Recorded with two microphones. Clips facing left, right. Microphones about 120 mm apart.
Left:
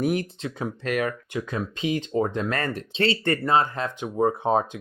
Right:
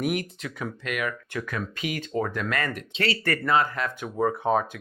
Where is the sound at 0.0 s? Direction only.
30° left (ahead or behind).